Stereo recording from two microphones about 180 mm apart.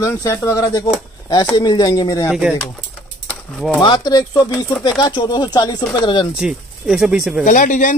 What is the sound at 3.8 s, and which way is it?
Speech, 25° left (ahead or behind).